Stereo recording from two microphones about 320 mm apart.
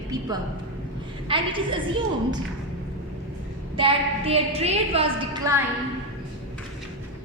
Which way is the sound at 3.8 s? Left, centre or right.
Centre.